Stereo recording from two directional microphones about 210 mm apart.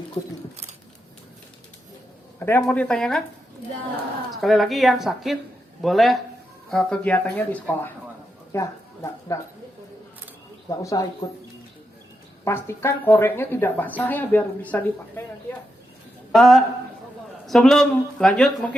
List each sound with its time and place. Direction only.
2.4 s a woman's voice: 10° left (ahead or behind)
4.3 s a woman's voice: centre (ahead or behind)
10.7 s a woman's voice: 15° left (ahead or behind)
12.5 s a woman's voice: 10° left (ahead or behind)